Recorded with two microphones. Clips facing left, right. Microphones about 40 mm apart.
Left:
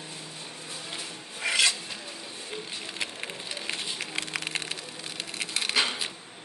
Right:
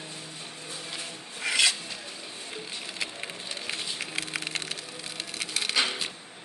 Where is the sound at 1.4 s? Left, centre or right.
Centre.